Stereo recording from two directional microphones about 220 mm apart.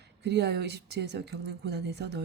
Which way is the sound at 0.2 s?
50° right (ahead or behind).